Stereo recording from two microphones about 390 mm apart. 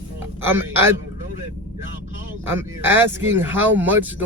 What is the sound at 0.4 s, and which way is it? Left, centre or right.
Speech, centre.